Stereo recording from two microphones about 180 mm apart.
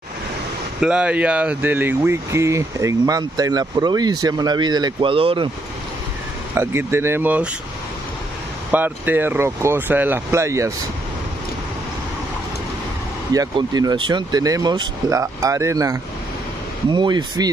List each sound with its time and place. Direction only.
0.7 s speech: 5° right (ahead or behind); by 5.5 s 30° right (ahead or behind)
6.5 s speech: 15° right (ahead or behind)
8.7 s speech: 10° right (ahead or behind)
13.3 s speech: 20° right (ahead or behind)